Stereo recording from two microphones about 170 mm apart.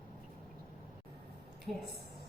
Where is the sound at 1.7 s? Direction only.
Centre (ahead or behind).